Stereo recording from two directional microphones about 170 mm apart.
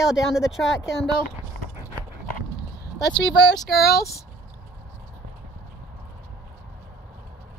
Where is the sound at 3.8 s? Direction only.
70° left (ahead or behind).